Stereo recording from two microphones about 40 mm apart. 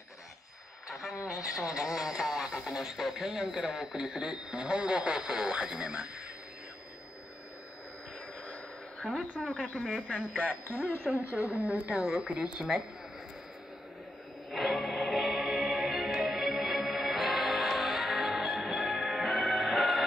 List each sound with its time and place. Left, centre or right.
0.8 s speech: centre
5.8 s speech: right
9.4 s speech: centre
10.1 s speech: right
11.3 s speech: right
11.9 s speech: centre
14.5 s music: centre
15.2 s music: centre